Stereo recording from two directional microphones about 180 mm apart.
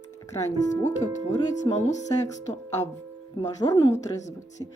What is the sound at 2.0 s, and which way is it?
Speech, 20° left (ahead or behind).